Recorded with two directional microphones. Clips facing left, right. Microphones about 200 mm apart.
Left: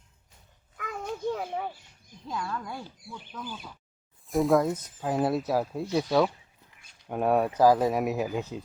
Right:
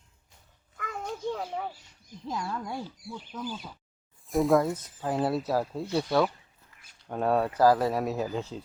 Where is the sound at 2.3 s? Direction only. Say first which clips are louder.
Right 1 dB; 25° right (ahead or behind).